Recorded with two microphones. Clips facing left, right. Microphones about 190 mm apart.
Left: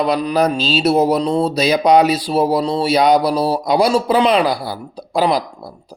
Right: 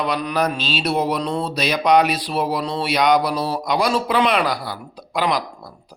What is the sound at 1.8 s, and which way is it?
Speech, 30° left (ahead or behind).